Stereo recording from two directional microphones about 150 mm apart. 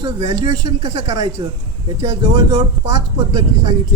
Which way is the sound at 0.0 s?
25° right (ahead or behind).